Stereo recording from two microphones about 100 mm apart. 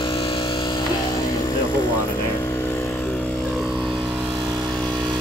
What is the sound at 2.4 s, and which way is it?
Vehicle, 25° left (ahead or behind).